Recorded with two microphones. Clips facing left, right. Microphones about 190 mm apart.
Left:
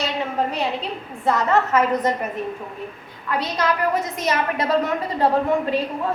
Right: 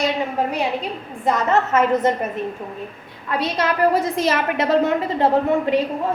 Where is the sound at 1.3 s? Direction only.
20° right (ahead or behind).